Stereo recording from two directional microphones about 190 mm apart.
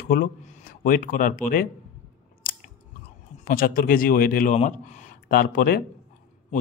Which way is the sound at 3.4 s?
50° left (ahead or behind).